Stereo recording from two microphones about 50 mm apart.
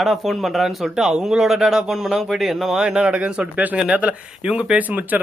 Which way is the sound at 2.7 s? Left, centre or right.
Centre.